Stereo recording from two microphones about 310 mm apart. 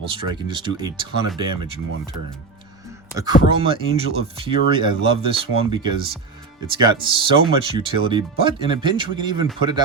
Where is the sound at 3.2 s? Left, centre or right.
Centre.